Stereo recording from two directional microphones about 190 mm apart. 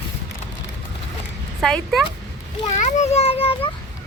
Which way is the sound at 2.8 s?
35° left (ahead or behind).